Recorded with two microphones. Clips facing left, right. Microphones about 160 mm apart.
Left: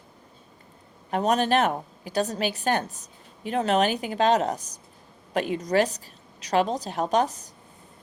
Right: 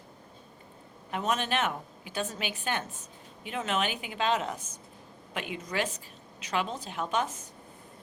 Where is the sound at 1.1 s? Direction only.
40° left (ahead or behind).